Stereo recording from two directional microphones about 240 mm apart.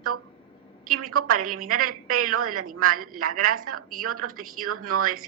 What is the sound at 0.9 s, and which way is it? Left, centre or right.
A woman's voice, right.